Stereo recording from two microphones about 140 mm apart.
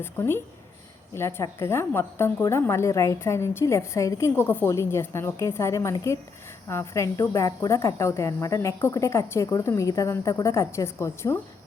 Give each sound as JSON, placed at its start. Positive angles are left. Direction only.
{"t": 0.0, "sound": "a woman's voice", "side_deg": 15}